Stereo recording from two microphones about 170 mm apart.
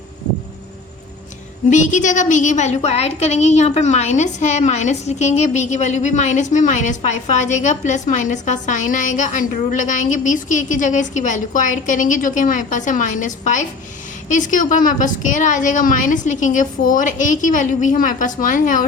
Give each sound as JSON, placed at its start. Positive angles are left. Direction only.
{"t": 1.7, "sound": "a woman's voice", "side_deg": 45}